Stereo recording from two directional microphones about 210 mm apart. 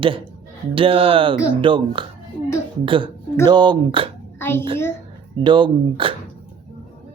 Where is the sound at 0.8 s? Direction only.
25° right (ahead or behind).